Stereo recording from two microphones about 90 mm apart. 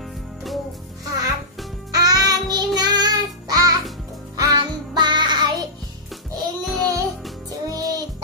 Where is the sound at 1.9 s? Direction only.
45° right (ahead or behind).